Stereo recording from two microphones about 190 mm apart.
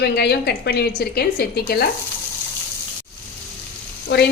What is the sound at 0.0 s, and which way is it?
A woman's voice, 60° left (ahead or behind).